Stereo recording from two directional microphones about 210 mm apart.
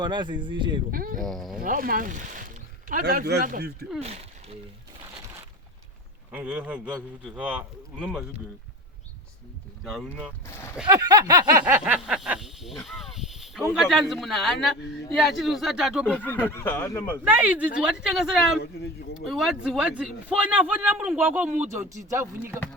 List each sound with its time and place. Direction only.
0.0 s speech: 20° right (ahead or behind)
0.9 s speech: 40° right (ahead or behind)
1.2 s a man's voice: centre (ahead or behind)
1.6 s speech: 40° right (ahead or behind)
4.0 s speech: 30° right (ahead or behind)
6.3 s a man's voice: 5° right (ahead or behind)
9.8 s a man's voice: centre (ahead or behind)
10.8 s a man's voice: 15° right (ahead or behind); by 17.2 s 10° left (ahead or behind)
17.2 s a man's voice: 5° right (ahead or behind)